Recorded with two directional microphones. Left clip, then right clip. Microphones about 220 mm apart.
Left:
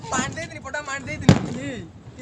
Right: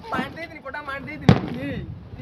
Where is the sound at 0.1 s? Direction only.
50° left (ahead or behind).